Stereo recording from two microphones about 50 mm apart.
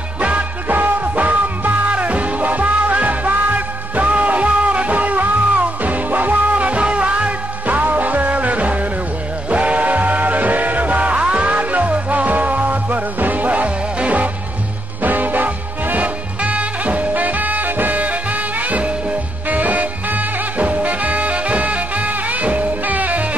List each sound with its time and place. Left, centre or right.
0.2 s music: right